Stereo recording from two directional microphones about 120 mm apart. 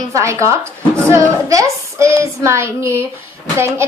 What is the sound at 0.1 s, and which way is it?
Speech, 25° right (ahead or behind).